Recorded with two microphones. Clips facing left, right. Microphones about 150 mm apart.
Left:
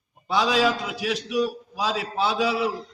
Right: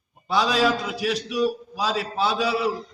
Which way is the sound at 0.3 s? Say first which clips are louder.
Even; 15° left (ahead or behind).